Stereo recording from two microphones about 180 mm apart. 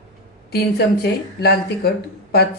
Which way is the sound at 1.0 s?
65° left (ahead or behind).